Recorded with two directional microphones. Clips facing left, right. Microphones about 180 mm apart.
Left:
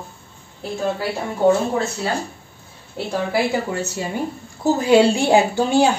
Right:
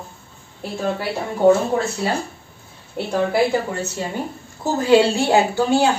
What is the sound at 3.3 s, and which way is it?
A woman's voice, 10° left (ahead or behind).